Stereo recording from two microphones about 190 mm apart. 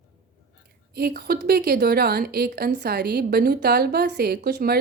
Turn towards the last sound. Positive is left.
turn(degrees=-55)  # may be behind; listen again after turning